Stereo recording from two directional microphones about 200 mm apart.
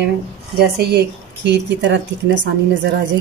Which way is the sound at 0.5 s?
55° right (ahead or behind).